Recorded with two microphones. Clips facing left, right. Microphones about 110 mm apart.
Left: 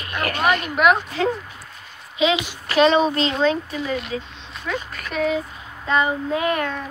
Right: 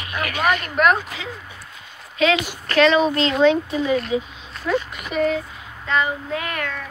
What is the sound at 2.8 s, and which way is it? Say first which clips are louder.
Speech: even; 25° left (ahead or behind).